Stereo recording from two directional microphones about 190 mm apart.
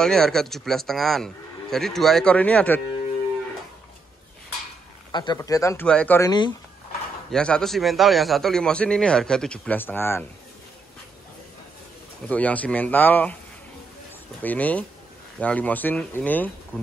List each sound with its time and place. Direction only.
0.0 s a man's voice: 5° left (ahead or behind)
5.1 s speech: 20° left (ahead or behind)
7.2 s a man's voice: 5° left (ahead or behind)
12.3 s speech: 10° left (ahead or behind)
14.4 s speech: 10° left (ahead or behind)